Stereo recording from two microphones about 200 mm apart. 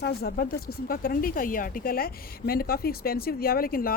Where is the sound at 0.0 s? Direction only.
50° left (ahead or behind).